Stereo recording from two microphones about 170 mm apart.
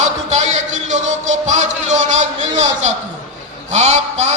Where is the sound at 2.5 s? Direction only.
40° right (ahead or behind).